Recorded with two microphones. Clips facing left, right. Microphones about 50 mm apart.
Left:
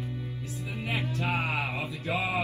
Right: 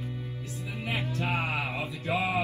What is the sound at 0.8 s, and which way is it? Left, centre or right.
Music, left.